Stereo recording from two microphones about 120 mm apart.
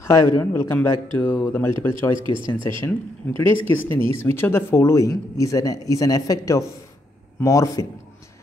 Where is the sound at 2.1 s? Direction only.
45° right (ahead or behind).